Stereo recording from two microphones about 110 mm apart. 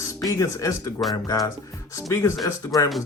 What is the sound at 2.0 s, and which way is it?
Speech, 25° left (ahead or behind).